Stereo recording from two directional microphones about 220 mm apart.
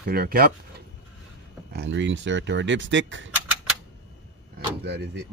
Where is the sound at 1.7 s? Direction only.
55° right (ahead or behind).